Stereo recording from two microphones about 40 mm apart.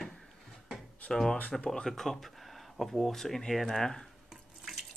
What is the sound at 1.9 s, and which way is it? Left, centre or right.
Speech, centre.